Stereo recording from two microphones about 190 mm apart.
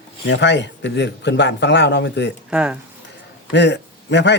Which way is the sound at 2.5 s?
5° right (ahead or behind).